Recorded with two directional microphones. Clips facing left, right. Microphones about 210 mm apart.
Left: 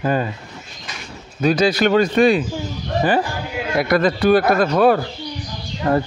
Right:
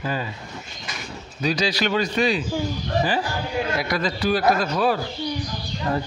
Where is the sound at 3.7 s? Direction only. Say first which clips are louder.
Left 8 dB; 55° left (ahead or behind).